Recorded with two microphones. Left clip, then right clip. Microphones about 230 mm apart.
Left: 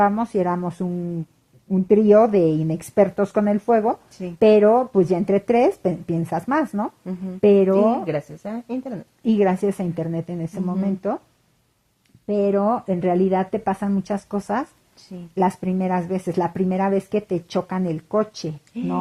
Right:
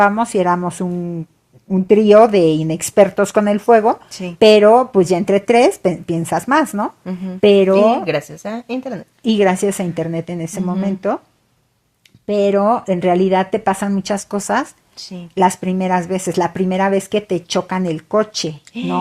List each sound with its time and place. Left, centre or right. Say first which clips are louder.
0.0 s a woman's voice: right 6 dB; right
12.2 s a woman's voice: right 6 dB; right